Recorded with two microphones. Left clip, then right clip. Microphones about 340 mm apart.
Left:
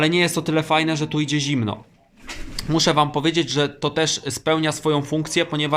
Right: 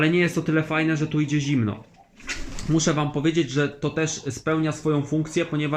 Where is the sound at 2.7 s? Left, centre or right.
Centre.